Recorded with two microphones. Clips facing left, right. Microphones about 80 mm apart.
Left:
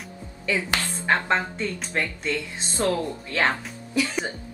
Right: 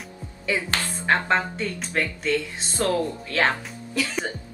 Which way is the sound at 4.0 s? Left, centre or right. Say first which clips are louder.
Left 1 dB; centre.